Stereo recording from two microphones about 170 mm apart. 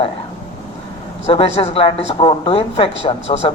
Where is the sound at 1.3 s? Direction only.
35° left (ahead or behind).